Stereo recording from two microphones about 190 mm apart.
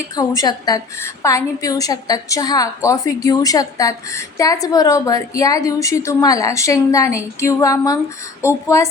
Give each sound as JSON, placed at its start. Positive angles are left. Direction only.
{"t": 0.2, "sound": "a woman's voice", "side_deg": 20}